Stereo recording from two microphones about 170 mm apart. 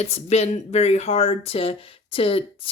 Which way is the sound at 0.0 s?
40° left (ahead or behind).